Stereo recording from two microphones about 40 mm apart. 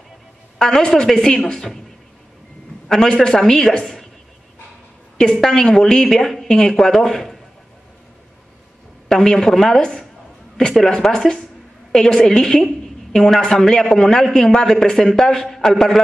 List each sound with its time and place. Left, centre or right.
0.6 s a woman's voice: centre
2.9 s a woman's voice: centre
5.1 s a woman's voice: centre
9.1 s a woman's voice: centre